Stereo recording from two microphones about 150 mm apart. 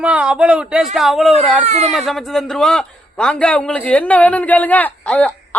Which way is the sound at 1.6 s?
45° right (ahead or behind).